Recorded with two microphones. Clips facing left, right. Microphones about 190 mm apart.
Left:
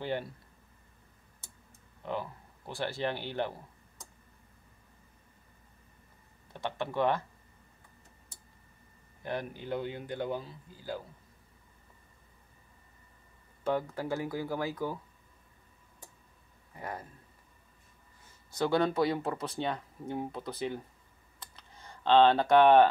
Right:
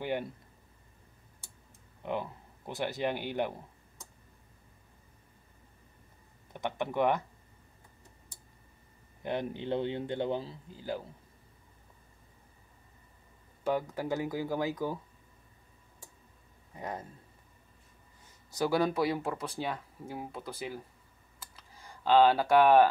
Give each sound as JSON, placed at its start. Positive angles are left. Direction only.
{"t": 2.0, "sound": "speech", "side_deg": -20}
{"t": 6.5, "sound": "speech", "side_deg": -15}
{"t": 9.2, "sound": "a man's voice", "side_deg": -20}
{"t": 13.7, "sound": "speech", "side_deg": -15}
{"t": 16.7, "sound": "speech", "side_deg": -20}
{"t": 18.7, "sound": "speech", "side_deg": -10}
{"t": 21.4, "sound": "computer keyboard", "side_deg": -5}